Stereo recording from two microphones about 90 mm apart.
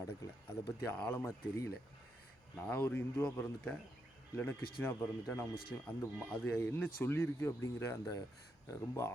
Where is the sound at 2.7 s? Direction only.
20° left (ahead or behind).